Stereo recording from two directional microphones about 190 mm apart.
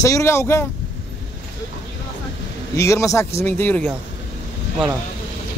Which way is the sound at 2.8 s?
15° left (ahead or behind).